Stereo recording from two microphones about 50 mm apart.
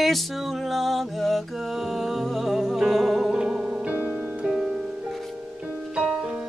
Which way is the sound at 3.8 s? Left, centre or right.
Right.